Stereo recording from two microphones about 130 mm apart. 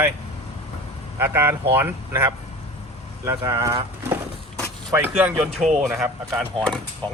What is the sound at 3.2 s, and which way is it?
Speech, 20° right (ahead or behind).